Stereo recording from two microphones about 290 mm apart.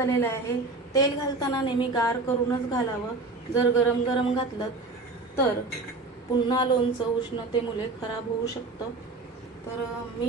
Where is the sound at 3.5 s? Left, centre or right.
Centre.